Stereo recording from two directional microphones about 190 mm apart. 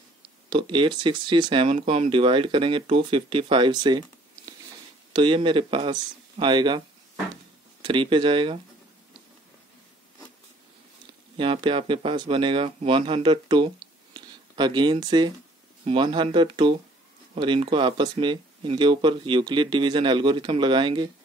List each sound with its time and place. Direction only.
0.5 s speech: 25° right (ahead or behind)
5.1 s speech: 25° right (ahead or behind)
7.8 s speech: 25° right (ahead or behind)
11.3 s speech: 25° right (ahead or behind)